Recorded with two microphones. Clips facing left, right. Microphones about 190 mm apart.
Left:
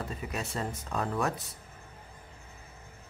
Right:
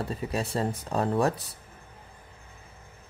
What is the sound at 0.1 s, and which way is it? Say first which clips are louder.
Speech: right 6 dB; 35° right (ahead or behind).